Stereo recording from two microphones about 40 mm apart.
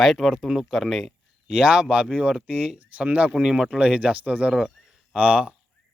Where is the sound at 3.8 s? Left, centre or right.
Right.